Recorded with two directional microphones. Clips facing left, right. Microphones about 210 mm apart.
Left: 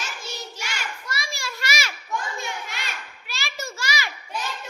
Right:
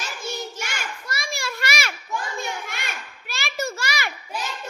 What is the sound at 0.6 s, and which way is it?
Children playing, 50° right (ahead or behind).